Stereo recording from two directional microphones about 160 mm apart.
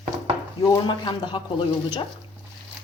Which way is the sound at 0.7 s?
30° left (ahead or behind).